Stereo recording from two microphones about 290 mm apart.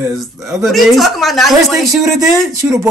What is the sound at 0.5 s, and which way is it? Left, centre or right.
Speech, centre.